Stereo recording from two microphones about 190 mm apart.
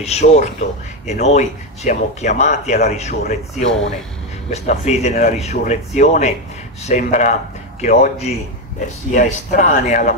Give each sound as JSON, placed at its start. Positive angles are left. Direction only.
{"t": 0.0, "sound": "a man's voice", "side_deg": 35}